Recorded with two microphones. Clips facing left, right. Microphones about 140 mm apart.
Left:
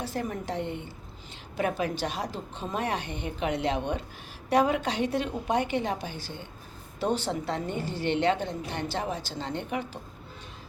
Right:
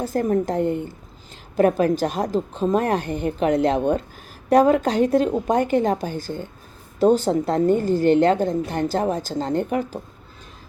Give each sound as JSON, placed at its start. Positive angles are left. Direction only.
{"t": 0.0, "sound": "a woman's voice", "side_deg": -45}